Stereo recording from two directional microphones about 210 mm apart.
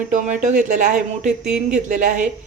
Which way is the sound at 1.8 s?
35° right (ahead or behind).